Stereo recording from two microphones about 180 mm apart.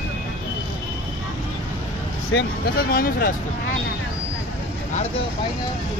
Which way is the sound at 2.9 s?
55° left (ahead or behind).